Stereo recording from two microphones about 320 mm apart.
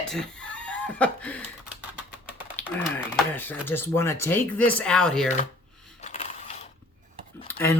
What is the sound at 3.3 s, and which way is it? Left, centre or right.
A woman's voice, centre.